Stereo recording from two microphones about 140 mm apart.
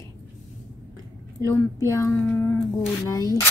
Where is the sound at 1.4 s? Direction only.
20° left (ahead or behind).